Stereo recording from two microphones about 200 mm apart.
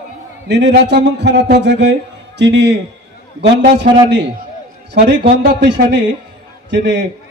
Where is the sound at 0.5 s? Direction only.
60° right (ahead or behind).